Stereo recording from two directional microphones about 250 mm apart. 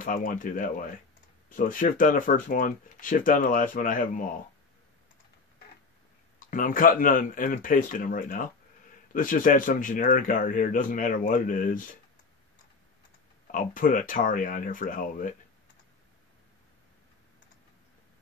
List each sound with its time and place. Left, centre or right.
0.0 s speech: left
6.4 s speech: left
13.5 s speech: left